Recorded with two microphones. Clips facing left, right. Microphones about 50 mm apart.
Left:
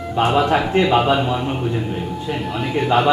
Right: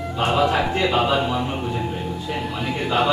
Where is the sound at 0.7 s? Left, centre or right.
Left.